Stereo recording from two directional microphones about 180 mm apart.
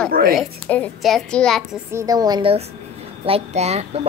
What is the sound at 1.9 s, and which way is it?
Speech, 20° right (ahead or behind).